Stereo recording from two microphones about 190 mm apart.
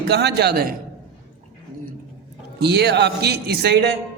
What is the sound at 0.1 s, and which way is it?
Speech, 60° right (ahead or behind).